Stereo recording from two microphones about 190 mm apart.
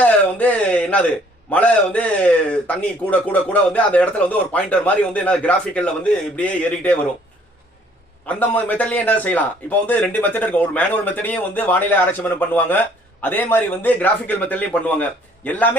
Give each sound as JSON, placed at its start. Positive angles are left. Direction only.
{"t": 0.0, "sound": "a sound", "side_deg": 5}
{"t": 1.5, "sound": "speech", "side_deg": 5}
{"t": 8.3, "sound": "speech", "side_deg": 10}